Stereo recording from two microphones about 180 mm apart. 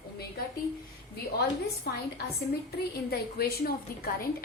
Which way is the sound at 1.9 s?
60° left (ahead or behind).